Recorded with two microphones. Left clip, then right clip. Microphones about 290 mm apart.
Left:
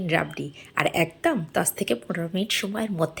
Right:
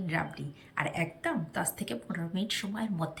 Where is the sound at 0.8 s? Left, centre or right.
Centre.